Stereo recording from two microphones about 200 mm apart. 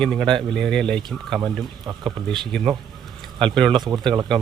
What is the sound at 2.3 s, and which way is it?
Speech, centre (ahead or behind).